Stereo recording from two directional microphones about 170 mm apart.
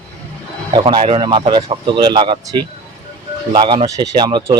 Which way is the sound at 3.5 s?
30° right (ahead or behind).